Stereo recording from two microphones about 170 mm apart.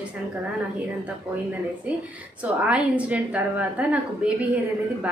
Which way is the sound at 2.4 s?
5° right (ahead or behind).